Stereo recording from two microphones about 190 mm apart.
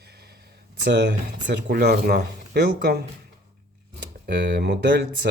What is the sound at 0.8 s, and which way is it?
Speech, 65° right (ahead or behind).